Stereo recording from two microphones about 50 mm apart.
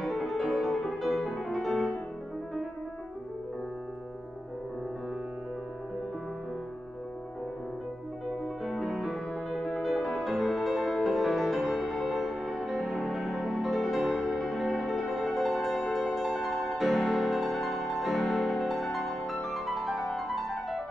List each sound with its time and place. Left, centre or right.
0.0 s music: centre
8.6 s music: centre